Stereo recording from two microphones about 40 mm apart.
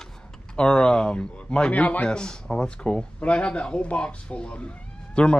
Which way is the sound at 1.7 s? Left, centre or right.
Left.